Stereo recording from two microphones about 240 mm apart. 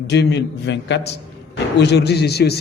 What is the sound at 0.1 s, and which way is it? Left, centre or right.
A man's voice, left.